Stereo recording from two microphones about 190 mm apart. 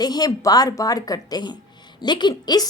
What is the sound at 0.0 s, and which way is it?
Speech, 20° left (ahead or behind).